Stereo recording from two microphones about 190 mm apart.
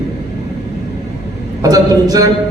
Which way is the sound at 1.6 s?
20° right (ahead or behind).